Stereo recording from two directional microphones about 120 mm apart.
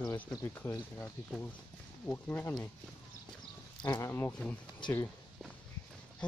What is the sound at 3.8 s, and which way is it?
Speech, 30° left (ahead or behind).